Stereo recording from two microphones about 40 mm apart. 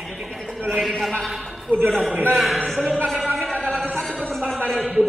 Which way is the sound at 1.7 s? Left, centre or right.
Right.